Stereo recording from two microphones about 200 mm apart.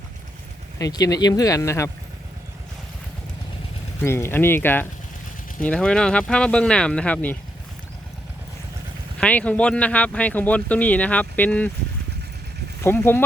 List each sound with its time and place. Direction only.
0.8 s speech: 15° left (ahead or behind)
4.0 s speech: 10° left (ahead or behind)
9.2 s speech: 5° left (ahead or behind)
12.8 s speech: 10° left (ahead or behind)